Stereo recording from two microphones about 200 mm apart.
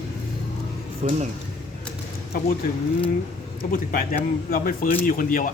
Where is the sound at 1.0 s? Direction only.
35° right (ahead or behind).